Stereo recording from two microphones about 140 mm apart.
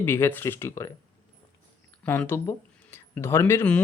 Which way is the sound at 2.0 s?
10° left (ahead or behind).